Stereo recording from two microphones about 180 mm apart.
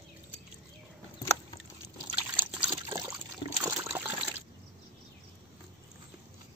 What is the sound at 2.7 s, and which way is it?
Pour, 20° right (ahead or behind).